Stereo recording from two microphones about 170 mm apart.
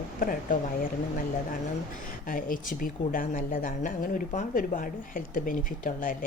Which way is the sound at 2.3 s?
55° left (ahead or behind).